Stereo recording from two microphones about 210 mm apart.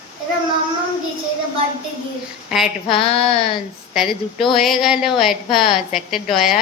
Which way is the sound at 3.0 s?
25° left (ahead or behind).